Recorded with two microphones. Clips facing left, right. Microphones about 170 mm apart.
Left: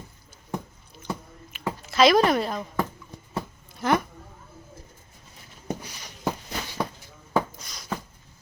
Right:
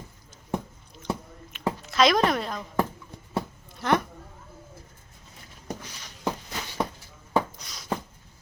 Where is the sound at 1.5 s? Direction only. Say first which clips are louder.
Left 1 dB; centre (ahead or behind).